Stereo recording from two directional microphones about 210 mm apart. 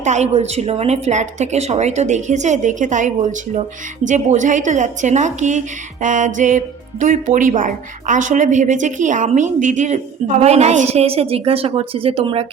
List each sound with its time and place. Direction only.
0.0 s speech: 35° right (ahead or behind)